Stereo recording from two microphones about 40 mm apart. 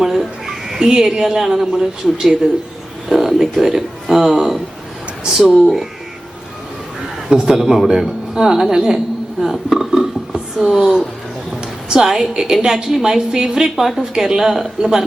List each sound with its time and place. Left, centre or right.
0.0 s a woman's voice: centre
7.3 s a man's voice: centre
9.4 s speech: centre
10.6 s speech: right
11.9 s a woman's voice: centre
14.0 s a woman's voice: centre